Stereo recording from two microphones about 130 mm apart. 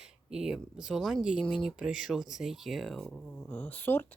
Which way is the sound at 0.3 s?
5° right (ahead or behind).